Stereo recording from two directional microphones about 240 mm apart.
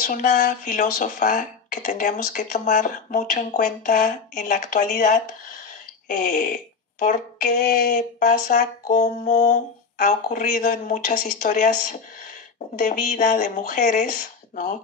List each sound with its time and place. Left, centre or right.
0.0 s speech: left